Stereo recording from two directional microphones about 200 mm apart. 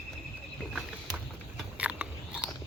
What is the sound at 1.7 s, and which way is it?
Biting, 5° right (ahead or behind).